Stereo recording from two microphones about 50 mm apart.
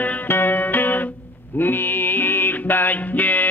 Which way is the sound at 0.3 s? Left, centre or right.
Left.